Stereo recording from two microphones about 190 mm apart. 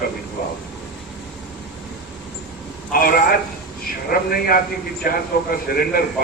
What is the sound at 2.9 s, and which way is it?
Speech, 50° left (ahead or behind).